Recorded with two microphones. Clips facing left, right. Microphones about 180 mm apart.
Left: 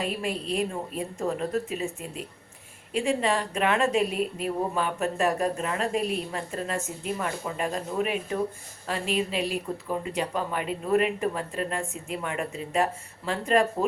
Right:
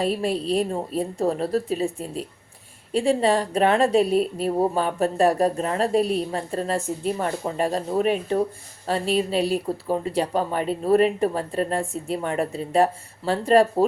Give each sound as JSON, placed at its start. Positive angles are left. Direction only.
{"t": 0.0, "sound": "a woman's voice", "side_deg": -35}